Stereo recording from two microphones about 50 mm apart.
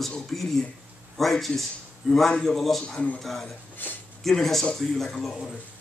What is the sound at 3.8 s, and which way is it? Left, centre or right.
Speech, left.